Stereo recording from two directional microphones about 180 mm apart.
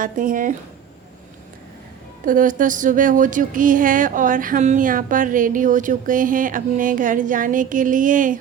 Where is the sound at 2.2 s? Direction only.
50° right (ahead or behind).